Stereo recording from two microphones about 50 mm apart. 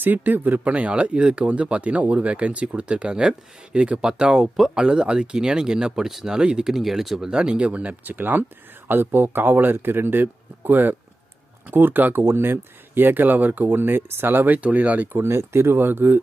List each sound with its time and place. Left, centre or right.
0.0 s speech: right
0.6 s speech: right; by 4.8 s centre
4.8 s speech: centre; by 12.2 s right
12.2 s speech: right
15.2 s speech: right